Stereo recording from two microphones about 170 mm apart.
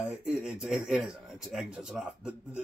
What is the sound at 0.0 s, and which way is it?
Speech, 5° right (ahead or behind).